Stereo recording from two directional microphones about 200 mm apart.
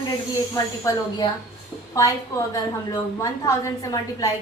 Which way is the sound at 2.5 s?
15° left (ahead or behind).